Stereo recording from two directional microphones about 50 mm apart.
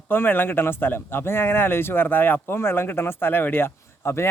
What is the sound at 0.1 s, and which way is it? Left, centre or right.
Speech, left.